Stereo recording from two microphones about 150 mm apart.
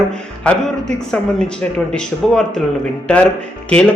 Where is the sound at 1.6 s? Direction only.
5° left (ahead or behind).